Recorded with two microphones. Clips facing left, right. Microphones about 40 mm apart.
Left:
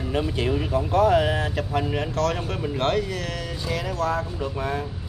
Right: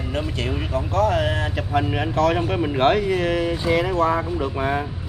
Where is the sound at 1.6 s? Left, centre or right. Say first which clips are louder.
Right 3 dB; centre.